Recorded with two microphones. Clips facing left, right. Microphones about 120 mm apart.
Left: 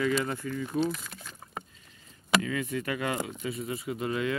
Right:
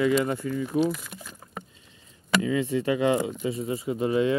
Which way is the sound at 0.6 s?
5° right (ahead or behind).